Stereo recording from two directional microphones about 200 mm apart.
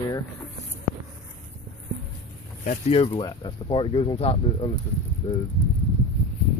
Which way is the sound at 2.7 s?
30° left (ahead or behind).